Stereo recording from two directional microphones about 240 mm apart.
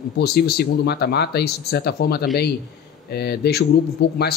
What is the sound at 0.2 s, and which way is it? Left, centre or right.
Speech, left.